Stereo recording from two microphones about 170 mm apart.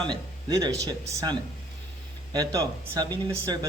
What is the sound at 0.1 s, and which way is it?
Speech, 25° right (ahead or behind).